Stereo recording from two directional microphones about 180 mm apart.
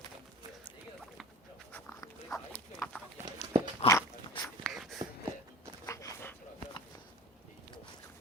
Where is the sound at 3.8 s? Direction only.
35° left (ahead or behind).